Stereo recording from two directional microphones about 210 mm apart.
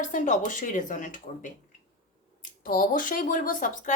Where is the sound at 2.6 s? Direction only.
40° left (ahead or behind).